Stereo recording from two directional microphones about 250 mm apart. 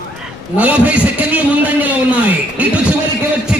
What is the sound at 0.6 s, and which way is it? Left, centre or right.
A man's voice, centre.